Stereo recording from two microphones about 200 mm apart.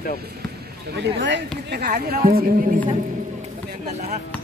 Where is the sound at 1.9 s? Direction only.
45° right (ahead or behind).